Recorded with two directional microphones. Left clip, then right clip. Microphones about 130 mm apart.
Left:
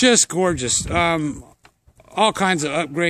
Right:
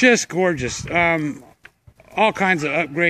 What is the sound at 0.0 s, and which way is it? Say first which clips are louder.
Speech: right 1 dB; 25° left (ahead or behind).